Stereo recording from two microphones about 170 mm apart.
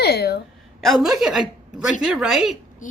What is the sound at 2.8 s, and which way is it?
Speech, 50° left (ahead or behind).